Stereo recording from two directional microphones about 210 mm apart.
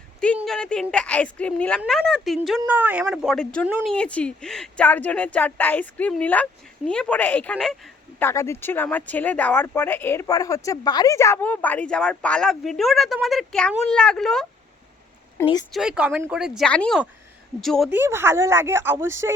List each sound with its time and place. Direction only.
0.3 s speech: centre (ahead or behind)
3.9 s speech: 5° left (ahead or behind)
15.4 s speech: 15° left (ahead or behind)
15.7 s speech: 5° right (ahead or behind)
17.9 s speech: 10° right (ahead or behind)